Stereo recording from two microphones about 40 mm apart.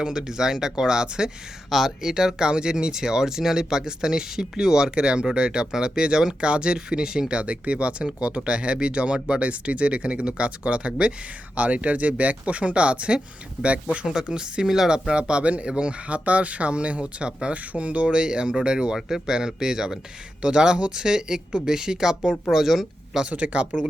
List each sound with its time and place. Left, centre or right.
0.0 s speech: centre
11.5 s speech: right
17.5 s speech: right; by 23.2 s centre
23.3 s speech: right